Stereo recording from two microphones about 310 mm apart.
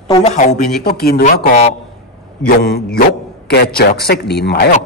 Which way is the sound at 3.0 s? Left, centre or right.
Left.